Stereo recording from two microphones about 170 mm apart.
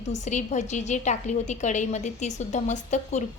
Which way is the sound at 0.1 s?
45° left (ahead or behind).